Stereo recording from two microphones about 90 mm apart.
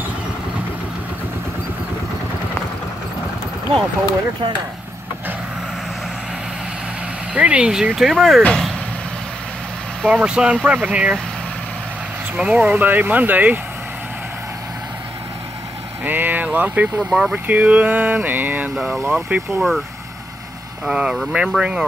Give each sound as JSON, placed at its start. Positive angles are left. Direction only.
{"t": 3.7, "sound": "speech", "side_deg": -75}
{"t": 7.3, "sound": "speech", "side_deg": -15}
{"t": 8.4, "sound": "speech", "side_deg": 10}
{"t": 10.0, "sound": "speech", "side_deg": -10}
{"t": 12.4, "sound": "speech", "side_deg": -15}
{"t": 16.0, "sound": "speech", "side_deg": -20}
{"t": 20.8, "sound": "speech", "side_deg": -10}